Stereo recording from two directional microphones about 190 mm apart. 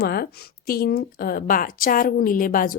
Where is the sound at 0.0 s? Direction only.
55° left (ahead or behind).